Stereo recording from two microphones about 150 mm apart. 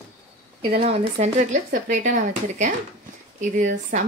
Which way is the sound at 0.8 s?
45° right (ahead or behind).